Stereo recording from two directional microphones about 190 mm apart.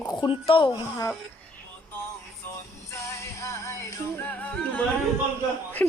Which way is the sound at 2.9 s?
15° left (ahead or behind).